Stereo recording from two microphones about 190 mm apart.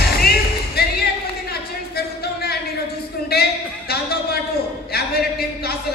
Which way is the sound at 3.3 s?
55° left (ahead or behind).